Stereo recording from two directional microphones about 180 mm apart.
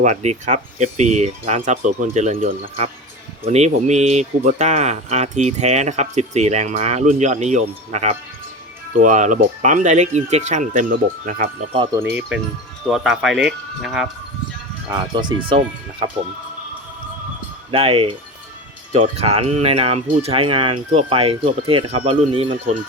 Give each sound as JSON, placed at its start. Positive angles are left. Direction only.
{"t": 0.0, "sound": "speech", "side_deg": -40}
{"t": 11.9, "sound": "speech", "side_deg": -10}
{"t": 14.8, "sound": "speech", "side_deg": -25}
{"t": 17.7, "sound": "speech", "side_deg": -30}